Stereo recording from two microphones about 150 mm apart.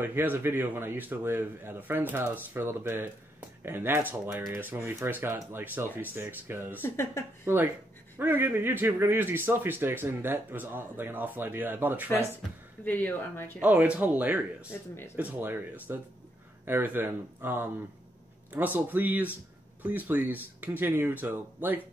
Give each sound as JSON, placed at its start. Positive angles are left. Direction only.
{"t": 0.0, "sound": "speech", "side_deg": -15}
{"t": 6.8, "sound": "speech", "side_deg": 15}
{"t": 7.4, "sound": "speech", "side_deg": -15}
{"t": 12.8, "sound": "speech", "side_deg": 10}
{"t": 13.6, "sound": "speech", "side_deg": -10}